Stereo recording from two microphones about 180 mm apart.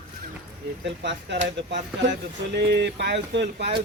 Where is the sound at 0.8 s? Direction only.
75° right (ahead or behind).